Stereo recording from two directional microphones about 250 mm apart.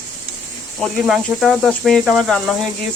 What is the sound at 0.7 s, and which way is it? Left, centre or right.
Speech, centre.